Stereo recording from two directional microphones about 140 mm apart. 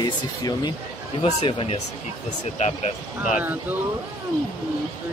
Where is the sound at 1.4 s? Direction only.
45° left (ahead or behind).